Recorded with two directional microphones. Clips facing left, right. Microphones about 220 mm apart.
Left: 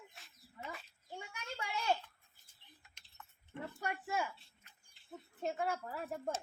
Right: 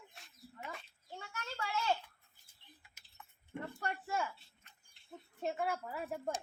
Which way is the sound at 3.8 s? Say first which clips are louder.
Left 1 dB; 5° left (ahead or behind).